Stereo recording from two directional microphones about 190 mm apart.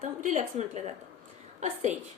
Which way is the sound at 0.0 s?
40° right (ahead or behind).